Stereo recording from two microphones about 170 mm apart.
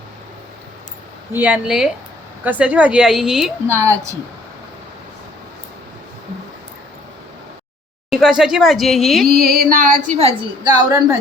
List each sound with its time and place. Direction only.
1.3 s a woman's voice: 10° right (ahead or behind)
3.8 s a woman's voice: 20° right (ahead or behind)
8.1 s speech: 5° right (ahead or behind)
9.2 s female singing: 65° right (ahead or behind)
10.2 s a woman's voice: 35° right (ahead or behind)
10.8 s a woman's voice: 15° right (ahead or behind)